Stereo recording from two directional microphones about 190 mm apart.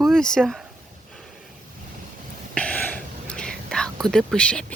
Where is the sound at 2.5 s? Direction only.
5° left (ahead or behind).